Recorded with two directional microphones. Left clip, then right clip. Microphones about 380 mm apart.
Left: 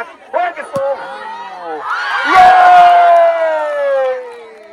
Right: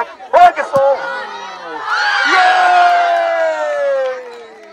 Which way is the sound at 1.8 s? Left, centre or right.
Centre.